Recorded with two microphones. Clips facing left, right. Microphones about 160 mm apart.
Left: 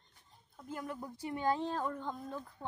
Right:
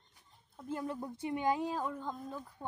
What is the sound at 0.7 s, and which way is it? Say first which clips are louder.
A woman's voice: right 4 dB; 25° right (ahead or behind).